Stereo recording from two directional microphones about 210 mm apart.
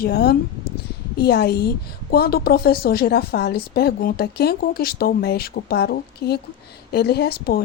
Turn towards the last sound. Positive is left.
turn(degrees=50)  # may be behind; listen again after turning